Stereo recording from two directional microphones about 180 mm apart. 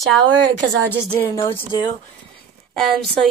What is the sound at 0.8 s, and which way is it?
Speech, 10° left (ahead or behind).